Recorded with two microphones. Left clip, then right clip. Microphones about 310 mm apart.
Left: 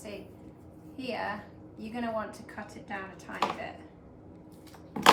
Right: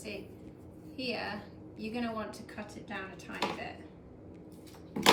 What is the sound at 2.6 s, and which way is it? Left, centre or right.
Speech, left.